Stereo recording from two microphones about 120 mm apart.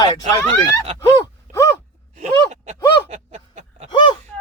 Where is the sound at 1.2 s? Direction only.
25° left (ahead or behind).